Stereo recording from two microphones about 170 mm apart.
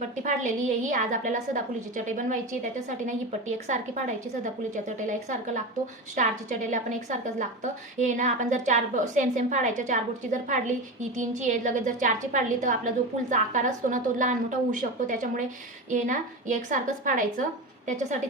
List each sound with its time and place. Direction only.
0.2 s a woman's voice: 50° right (ahead or behind)
3.7 s a woman's voice: 45° right (ahead or behind)